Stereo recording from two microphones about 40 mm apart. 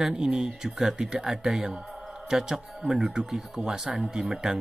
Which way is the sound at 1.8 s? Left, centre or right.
Centre.